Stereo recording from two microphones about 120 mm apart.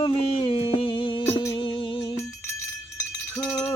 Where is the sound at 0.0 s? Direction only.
50° left (ahead or behind).